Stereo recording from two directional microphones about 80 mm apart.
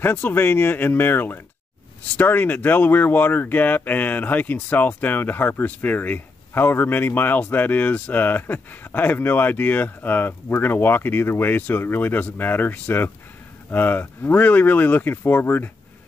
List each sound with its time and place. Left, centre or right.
0.0 s speech: left